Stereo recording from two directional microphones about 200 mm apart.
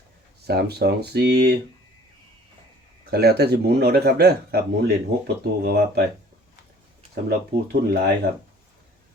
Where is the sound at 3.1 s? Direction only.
55° right (ahead or behind).